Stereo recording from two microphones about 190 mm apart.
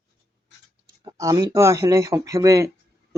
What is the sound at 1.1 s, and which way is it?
Speech, 20° right (ahead or behind).